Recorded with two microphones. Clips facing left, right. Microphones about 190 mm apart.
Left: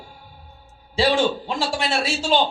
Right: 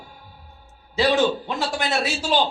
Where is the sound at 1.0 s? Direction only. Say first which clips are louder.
Even; 30° left (ahead or behind).